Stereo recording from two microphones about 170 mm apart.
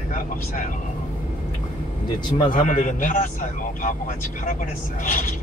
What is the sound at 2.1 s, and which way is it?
Speech, 25° left (ahead or behind).